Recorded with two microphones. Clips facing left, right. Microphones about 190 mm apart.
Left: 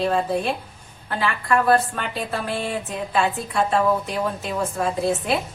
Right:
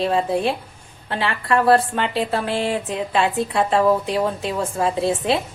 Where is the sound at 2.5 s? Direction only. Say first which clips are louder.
Right 4 dB; 90° right.